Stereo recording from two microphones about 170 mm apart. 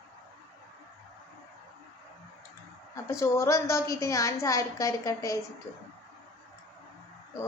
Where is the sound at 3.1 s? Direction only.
15° left (ahead or behind).